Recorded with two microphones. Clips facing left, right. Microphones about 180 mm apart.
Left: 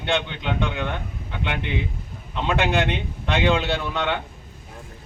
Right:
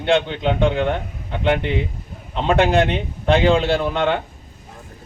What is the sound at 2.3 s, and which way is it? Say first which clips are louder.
Speech: right 6 dB; 35° right (ahead or behind).